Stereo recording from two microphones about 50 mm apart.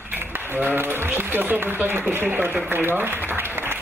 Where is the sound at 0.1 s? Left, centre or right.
Right.